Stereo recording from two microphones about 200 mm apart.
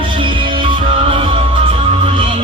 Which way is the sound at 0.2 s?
25° right (ahead or behind).